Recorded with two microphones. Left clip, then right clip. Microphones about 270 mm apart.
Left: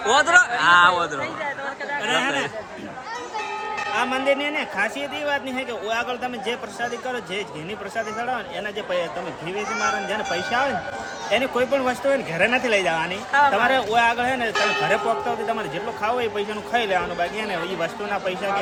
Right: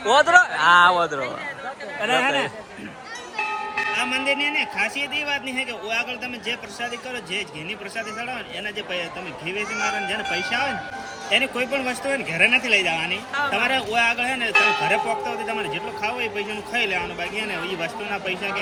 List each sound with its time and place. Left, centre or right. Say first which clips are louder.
0.1 s speech: right 1 dB; centre
2.0 s speech: right 2 dB; right
3.9 s a man's voice: left 3 dB; centre
4.3 s a man's voice: left 1 dB; left
4.5 s speech: right 1 dB; centre
7.9 s speech: left 5 dB; centre
9.5 s a man's voice: left 1 dB; left
10.1 s speech: even; centre
13.1 s speech: left 6 dB; left
13.5 s speech: left 3 dB; centre
16.7 s speech: left 2 dB; centre